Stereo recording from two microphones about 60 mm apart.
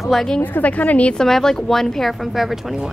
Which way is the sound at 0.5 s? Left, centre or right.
Left.